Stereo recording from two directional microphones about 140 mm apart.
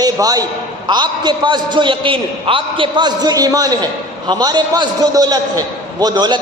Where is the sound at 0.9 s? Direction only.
30° right (ahead or behind).